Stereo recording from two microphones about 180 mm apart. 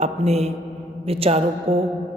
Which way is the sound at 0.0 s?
35° right (ahead or behind).